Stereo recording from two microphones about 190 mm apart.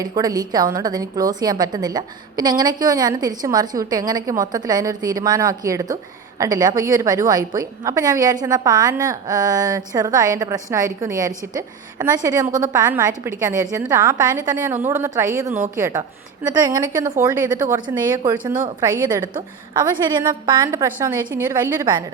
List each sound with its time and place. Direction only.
0.0 s a woman's voice: 20° right (ahead or behind)
17.7 s a woman's voice: 25° right (ahead or behind)